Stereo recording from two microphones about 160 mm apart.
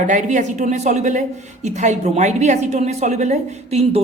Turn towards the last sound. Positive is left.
turn(degrees=-45)  # may be behind; listen again after turning